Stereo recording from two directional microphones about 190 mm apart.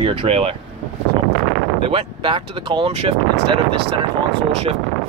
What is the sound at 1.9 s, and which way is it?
Speech, 30° right (ahead or behind).